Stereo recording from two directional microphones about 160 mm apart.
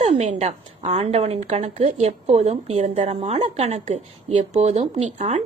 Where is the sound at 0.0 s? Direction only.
45° right (ahead or behind).